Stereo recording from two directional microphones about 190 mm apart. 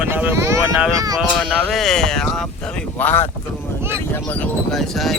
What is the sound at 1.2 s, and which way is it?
Speech, centre (ahead or behind).